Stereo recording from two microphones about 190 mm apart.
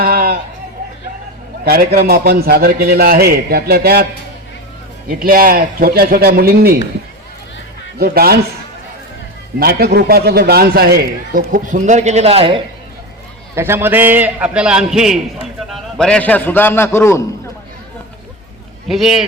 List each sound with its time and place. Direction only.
0.0 s a sound: 50° right (ahead or behind)
1.6 s a man's voice: 50° right (ahead or behind)
5.0 s a man's voice: 50° right (ahead or behind)
7.9 s a man's voice: 55° right (ahead or behind)
9.6 s a man's voice: 55° right (ahead or behind); by 12.6 s 30° right (ahead or behind)
13.6 s a man's voice: 10° right (ahead or behind); by 17.2 s 15° left (ahead or behind)
18.9 s speech: centre (ahead or behind)